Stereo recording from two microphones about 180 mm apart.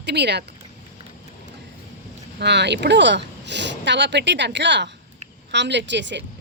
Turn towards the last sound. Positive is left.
turn(degrees=-80)